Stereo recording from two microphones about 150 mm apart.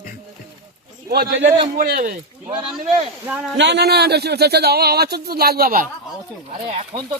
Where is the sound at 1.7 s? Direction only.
75° right (ahead or behind).